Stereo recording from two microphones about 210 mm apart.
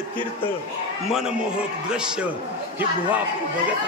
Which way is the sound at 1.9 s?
5° right (ahead or behind).